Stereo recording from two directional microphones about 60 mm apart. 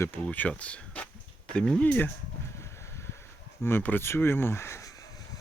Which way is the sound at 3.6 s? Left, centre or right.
Left.